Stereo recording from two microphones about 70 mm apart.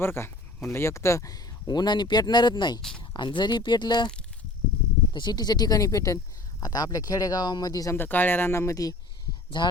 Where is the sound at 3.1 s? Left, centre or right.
Left.